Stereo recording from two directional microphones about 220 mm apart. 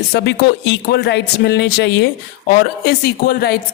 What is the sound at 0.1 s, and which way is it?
Speech, 50° left (ahead or behind).